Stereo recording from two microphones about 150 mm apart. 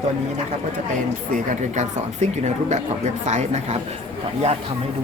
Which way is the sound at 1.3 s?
55° right (ahead or behind).